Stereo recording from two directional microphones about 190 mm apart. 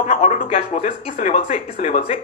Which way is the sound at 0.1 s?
40° left (ahead or behind).